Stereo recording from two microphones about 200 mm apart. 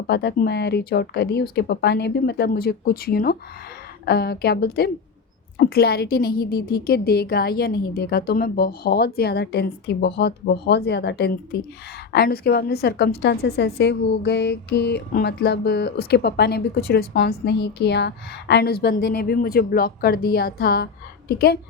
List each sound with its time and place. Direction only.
0.1 s a woman's voice: 55° left (ahead or behind)